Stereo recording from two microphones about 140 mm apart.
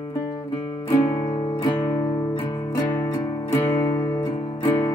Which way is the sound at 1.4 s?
30° left (ahead or behind).